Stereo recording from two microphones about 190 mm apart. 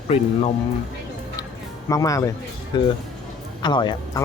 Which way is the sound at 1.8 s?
15° left (ahead or behind).